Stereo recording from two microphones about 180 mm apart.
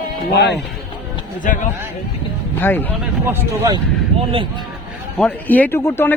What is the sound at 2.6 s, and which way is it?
Speech, 10° left (ahead or behind).